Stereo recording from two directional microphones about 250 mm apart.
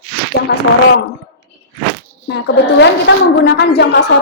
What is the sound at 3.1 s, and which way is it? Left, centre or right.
Speech, left.